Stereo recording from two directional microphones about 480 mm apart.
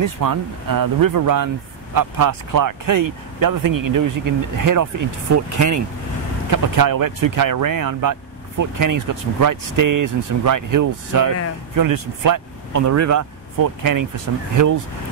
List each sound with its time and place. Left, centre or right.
0.0 s speech: right